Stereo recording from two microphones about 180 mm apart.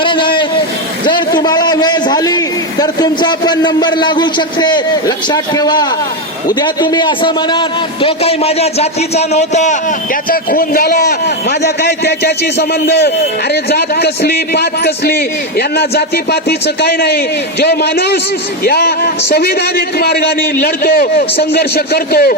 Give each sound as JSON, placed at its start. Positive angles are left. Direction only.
{"t": 0.0, "sound": "a sound", "side_deg": 25}
{"t": 1.0, "sound": "a man's voice", "side_deg": 25}
{"t": 10.2, "sound": "a man's voice", "side_deg": 50}